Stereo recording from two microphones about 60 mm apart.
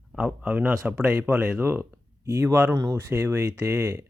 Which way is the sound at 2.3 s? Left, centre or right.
Right.